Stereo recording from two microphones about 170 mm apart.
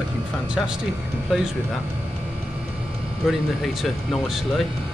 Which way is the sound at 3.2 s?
Centre (ahead or behind).